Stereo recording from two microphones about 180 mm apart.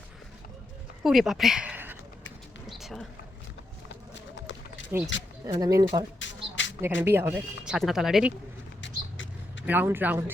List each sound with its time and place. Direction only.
1.0 s speech: centre (ahead or behind)
2.6 s a sound: centre (ahead or behind)
3.8 s run: 90° left
5.5 s speech: 20° right (ahead or behind)
6.1 s a sound: 90° left
6.8 s speech: 15° right (ahead or behind)
8.8 s vehicle: 90° left
9.6 s speech: 10° right (ahead or behind)